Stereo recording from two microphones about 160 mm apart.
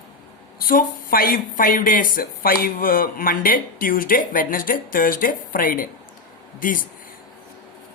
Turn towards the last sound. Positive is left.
turn(degrees=60)  # may be behind; listen again after turning